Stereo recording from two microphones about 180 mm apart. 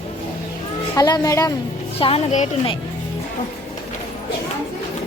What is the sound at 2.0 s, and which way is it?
Speech, 35° left (ahead or behind).